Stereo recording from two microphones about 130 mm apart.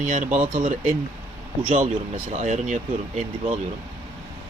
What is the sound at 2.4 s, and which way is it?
Speech, 70° right (ahead or behind).